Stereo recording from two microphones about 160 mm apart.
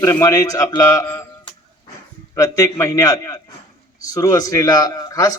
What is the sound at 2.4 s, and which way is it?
A man's voice, 20° left (ahead or behind).